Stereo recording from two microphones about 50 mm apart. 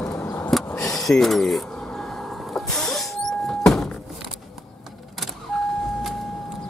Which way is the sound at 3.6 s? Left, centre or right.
Centre.